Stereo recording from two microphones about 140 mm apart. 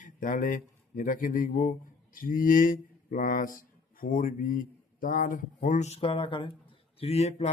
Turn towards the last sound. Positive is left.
turn(degrees=50)  # may be behind; listen again after turning